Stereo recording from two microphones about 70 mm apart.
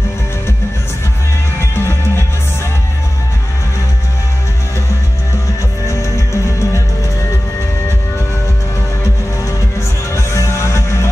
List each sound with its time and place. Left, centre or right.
1.6 s music: left
5.9 s music: left
10.1 s music: left